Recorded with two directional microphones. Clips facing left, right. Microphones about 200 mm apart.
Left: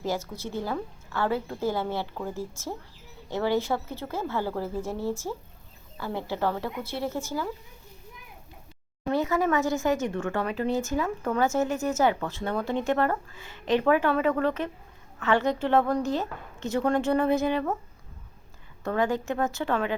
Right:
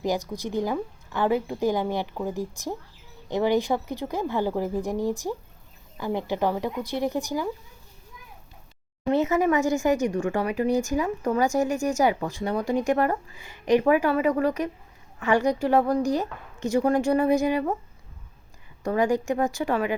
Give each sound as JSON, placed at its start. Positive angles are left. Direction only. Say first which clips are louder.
{"t": 0.0, "sound": "speech", "louder": "right 4 dB", "side_deg": -15}
{"t": 9.0, "sound": "speech", "louder": "right 3 dB", "side_deg": -20}
{"t": 18.8, "sound": "speech", "louder": "right 3 dB", "side_deg": -15}